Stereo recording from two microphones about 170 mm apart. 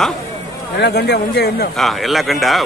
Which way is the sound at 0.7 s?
80° left.